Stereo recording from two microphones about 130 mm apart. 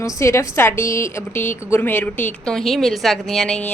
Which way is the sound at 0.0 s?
25° left (ahead or behind).